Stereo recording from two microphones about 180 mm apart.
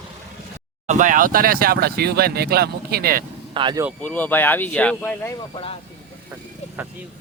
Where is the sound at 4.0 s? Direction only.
10° left (ahead or behind).